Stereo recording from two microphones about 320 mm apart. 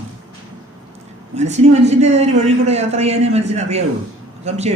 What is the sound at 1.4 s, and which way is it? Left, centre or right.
A man's voice, right.